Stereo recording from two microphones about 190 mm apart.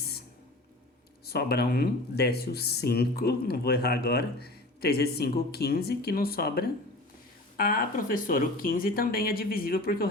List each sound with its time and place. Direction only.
1.3 s speech: 55° left (ahead or behind)